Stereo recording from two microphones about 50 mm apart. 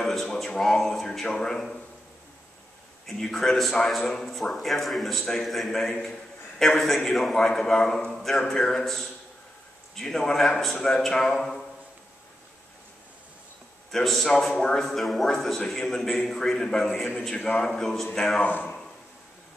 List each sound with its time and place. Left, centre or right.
0.1 s a man's voice: centre
3.1 s a man's voice: centre
13.9 s a man's voice: centre
18.4 s a man's voice: left